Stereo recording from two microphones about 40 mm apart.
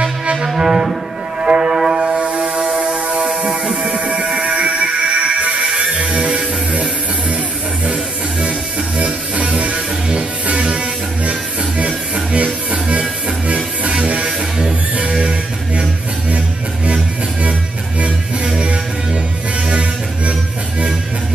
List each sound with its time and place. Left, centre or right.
0.0 s music: right
2.2 s a sound: right
3.3 s a sound: centre
3.9 s a sound: right
4.3 s music: right
11.8 s music: right
12.7 s music: centre
16.8 s music: right
19.7 s music: right